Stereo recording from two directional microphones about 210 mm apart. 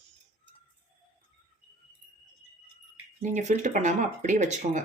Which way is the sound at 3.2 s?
35° right (ahead or behind).